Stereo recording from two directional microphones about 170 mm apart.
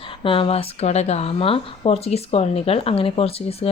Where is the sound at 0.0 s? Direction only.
30° left (ahead or behind).